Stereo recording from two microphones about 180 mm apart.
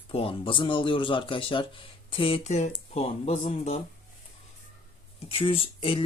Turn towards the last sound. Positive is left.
turn(degrees=30)  # may be behind; listen again after turning